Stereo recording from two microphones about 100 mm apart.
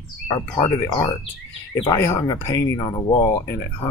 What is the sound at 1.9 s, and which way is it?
Speech, 30° left (ahead or behind).